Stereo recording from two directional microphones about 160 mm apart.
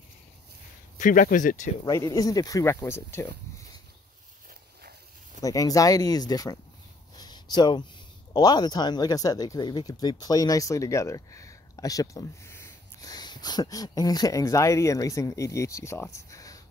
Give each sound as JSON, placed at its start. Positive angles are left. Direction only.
{"t": 0.9, "sound": "speech", "side_deg": 55}
{"t": 1.9, "sound": "speech", "side_deg": 20}
{"t": 5.4, "sound": "speech", "side_deg": 20}
{"t": 7.2, "sound": "a sound", "side_deg": 25}
{"t": 8.3, "sound": "speech", "side_deg": 25}